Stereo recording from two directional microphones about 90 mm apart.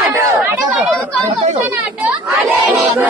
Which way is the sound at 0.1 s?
30° right (ahead or behind).